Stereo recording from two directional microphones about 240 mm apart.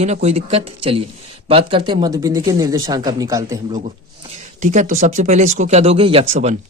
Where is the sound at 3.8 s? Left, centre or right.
Centre.